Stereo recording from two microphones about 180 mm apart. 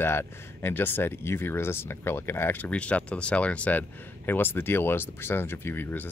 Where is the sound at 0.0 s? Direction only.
15° left (ahead or behind).